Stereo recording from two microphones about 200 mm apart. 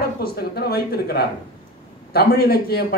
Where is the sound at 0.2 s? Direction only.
50° left (ahead or behind).